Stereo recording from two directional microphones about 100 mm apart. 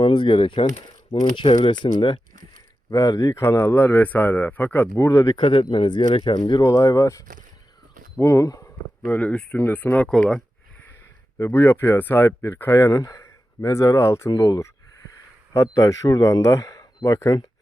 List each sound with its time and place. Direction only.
0.0 s speech: 55° left (ahead or behind)
2.9 s speech: 40° left (ahead or behind); by 5.0 s 20° left (ahead or behind)
5.0 s a man's voice: 35° left (ahead or behind)
5.4 s speech: 60° left (ahead or behind)
6.6 s a man's voice: 30° left (ahead or behind)
9.0 s speech: 15° left (ahead or behind)
11.3 s speech: 25° left (ahead or behind)
12.9 s speech: 35° left (ahead or behind)
14.3 s a man's voice: 40° left (ahead or behind)